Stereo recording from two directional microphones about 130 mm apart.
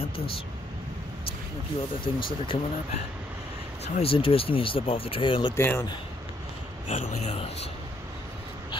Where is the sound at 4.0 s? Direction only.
45° left (ahead or behind).